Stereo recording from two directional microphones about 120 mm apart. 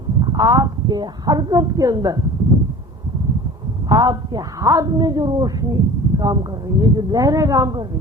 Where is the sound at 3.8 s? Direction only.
35° right (ahead or behind).